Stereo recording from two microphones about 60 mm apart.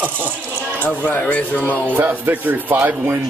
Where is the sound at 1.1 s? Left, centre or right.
Left.